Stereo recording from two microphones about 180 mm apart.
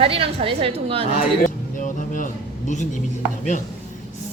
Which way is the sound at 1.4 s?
45° left (ahead or behind).